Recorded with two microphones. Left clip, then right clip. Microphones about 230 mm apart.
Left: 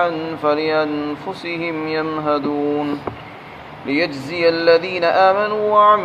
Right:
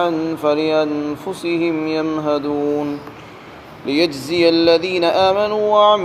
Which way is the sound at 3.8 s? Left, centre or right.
Right.